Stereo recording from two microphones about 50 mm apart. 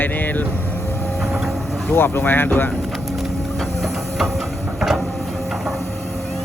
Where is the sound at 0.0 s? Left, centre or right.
Left.